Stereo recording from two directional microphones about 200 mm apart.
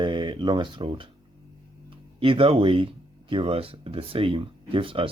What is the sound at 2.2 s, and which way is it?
Speech, 25° right (ahead or behind).